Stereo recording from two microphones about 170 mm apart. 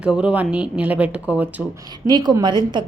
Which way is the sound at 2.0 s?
25° right (ahead or behind).